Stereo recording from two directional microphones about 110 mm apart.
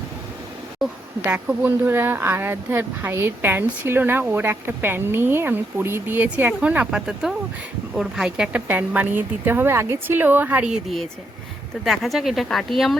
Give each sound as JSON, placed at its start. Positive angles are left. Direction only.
{"t": 0.8, "sound": "speech", "side_deg": 0}
{"t": 1.2, "sound": "a woman's voice", "side_deg": -15}